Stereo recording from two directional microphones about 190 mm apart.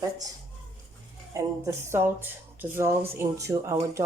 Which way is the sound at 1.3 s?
15° right (ahead or behind).